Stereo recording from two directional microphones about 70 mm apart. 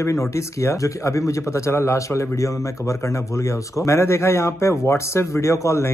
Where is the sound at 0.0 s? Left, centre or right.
Left.